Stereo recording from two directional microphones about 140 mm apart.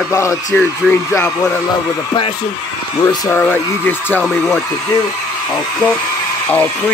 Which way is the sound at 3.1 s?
25° left (ahead or behind).